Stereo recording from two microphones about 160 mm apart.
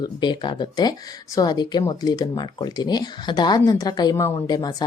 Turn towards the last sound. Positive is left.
turn(degrees=25)  # may be behind; listen again after turning